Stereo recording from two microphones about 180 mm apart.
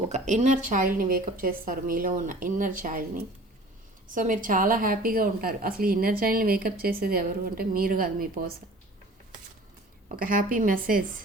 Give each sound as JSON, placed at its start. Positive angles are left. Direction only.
{"t": 0.1, "sound": "a woman's voice", "side_deg": -40}
{"t": 10.2, "sound": "a woman's voice", "side_deg": -50}